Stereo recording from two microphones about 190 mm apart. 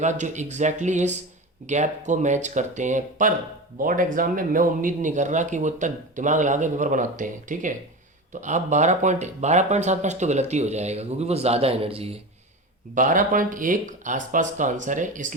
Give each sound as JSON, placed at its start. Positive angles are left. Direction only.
{"t": 0.0, "sound": "speech", "side_deg": -40}
{"t": 12.9, "sound": "speech", "side_deg": -45}